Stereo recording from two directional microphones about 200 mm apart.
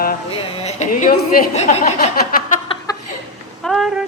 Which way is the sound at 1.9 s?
45° left (ahead or behind).